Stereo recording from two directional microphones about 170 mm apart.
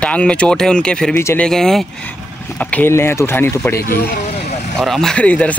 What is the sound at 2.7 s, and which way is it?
Speech, 15° left (ahead or behind).